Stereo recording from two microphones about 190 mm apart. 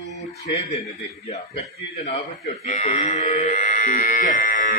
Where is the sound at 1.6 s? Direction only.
35° left (ahead or behind).